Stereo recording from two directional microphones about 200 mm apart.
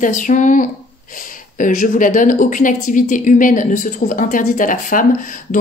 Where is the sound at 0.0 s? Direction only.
40° left (ahead or behind).